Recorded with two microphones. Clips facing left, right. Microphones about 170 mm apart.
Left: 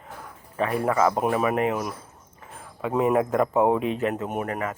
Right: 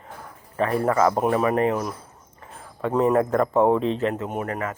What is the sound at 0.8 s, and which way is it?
Speech, 10° left (ahead or behind).